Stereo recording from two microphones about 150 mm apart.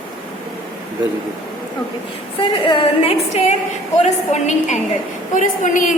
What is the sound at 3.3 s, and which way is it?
A woman's voice, 50° left (ahead or behind).